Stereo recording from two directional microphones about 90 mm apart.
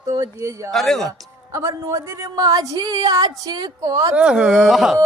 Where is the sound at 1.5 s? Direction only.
35° right (ahead or behind).